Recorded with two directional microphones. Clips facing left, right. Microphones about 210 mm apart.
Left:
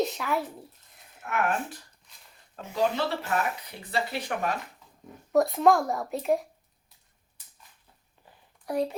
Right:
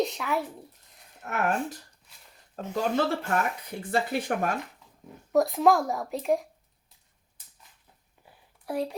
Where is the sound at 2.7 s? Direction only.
50° right (ahead or behind).